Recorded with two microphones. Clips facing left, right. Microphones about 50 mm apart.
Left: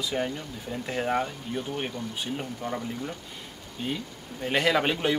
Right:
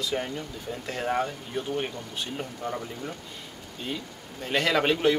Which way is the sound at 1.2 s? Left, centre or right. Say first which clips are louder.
Right 1 dB; centre.